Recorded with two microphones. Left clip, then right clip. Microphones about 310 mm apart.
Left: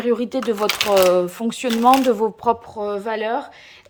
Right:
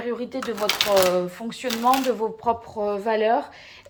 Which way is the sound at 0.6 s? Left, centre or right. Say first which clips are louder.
Left 2 dB; centre.